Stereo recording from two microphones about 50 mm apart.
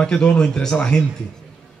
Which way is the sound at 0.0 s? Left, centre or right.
Left.